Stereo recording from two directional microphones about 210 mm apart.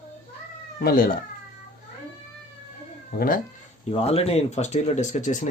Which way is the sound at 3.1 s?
45° left (ahead or behind).